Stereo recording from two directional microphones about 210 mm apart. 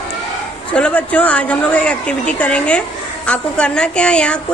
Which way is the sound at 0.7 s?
5° left (ahead or behind).